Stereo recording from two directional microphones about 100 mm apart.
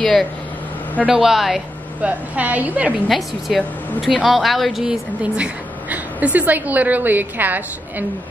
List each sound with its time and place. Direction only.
0.0 s speech: 5° left (ahead or behind)
2.0 s a woman's voice: 15° right (ahead or behind)
3.1 s speech: centre (ahead or behind)
5.2 s a woman's voice: 15° right (ahead or behind)